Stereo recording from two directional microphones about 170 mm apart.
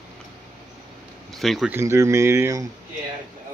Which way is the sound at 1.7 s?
15° right (ahead or behind).